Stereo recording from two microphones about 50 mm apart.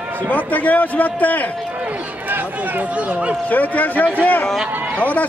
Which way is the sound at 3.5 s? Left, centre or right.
Left.